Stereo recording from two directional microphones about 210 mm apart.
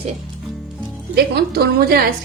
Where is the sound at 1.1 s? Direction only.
50° right (ahead or behind).